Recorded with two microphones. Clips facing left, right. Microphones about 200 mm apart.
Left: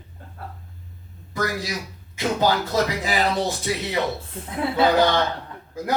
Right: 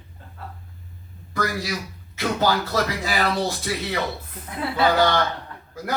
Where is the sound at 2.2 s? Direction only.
20° left (ahead or behind).